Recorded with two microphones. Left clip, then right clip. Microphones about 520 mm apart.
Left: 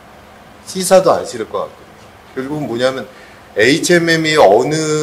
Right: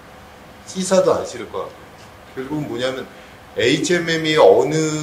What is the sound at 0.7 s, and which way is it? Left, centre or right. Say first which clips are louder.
Speech: left 6 dB; left.